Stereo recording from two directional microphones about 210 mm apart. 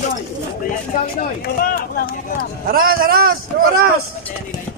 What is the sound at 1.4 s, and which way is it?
Speech, 45° left (ahead or behind).